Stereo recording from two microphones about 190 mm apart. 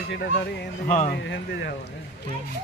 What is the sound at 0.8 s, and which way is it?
Speech, 45° left (ahead or behind).